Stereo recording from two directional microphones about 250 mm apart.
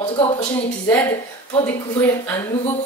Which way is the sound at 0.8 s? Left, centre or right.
Centre.